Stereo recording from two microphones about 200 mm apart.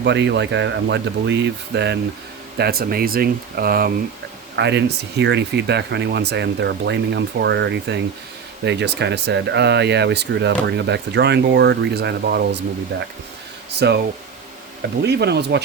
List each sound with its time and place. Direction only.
0.0 s speech: 60° right (ahead or behind)
4.5 s speech: 60° right (ahead or behind)
15.0 s speech: 55° right (ahead or behind)